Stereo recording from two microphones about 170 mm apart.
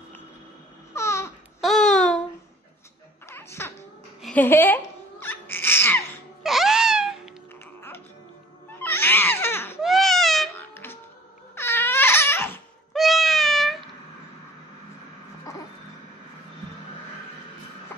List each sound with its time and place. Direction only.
0.9 s babbling: 15° left (ahead or behind)
1.6 s a sound: centre (ahead or behind)
3.3 s music: 15° left (ahead or behind)
4.2 s crying: 10° left (ahead or behind)
6.4 s wail: centre (ahead or behind)
8.7 s baby cry: 10° left (ahead or behind)
9.8 s baby cry: centre (ahead or behind)
10.6 s music: 15° left (ahead or behind)
11.5 s crying: 15° left (ahead or behind)
12.9 s cat: centre (ahead or behind)